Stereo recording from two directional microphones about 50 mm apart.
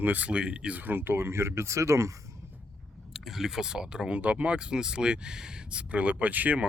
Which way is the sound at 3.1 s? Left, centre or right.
Centre.